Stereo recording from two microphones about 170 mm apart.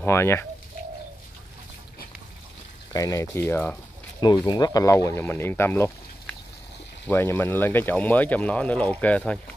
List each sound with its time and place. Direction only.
0.0 s speech: 15° left (ahead or behind)
2.9 s speech: 20° left (ahead or behind)
4.2 s speech: 25° left (ahead or behind); by 9.4 s 5° left (ahead or behind)